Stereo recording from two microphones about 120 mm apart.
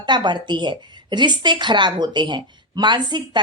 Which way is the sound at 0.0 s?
40° right (ahead or behind).